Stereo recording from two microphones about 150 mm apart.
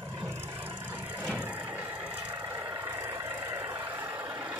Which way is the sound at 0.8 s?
10° right (ahead or behind).